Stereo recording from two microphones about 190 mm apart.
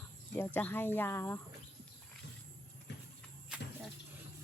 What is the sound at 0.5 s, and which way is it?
Speech, 10° left (ahead or behind).